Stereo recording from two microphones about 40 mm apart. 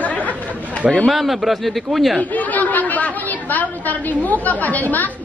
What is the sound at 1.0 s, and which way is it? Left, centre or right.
A man's voice, centre.